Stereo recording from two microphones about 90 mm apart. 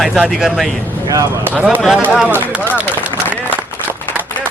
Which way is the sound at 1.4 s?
25° right (ahead or behind).